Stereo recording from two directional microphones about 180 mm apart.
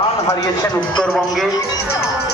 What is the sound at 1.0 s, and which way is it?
Speech, centre (ahead or behind).